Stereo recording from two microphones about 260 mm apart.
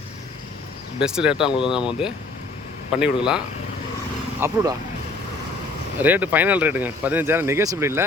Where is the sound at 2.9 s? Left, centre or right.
Centre.